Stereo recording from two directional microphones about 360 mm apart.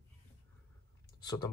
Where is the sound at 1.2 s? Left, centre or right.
Centre.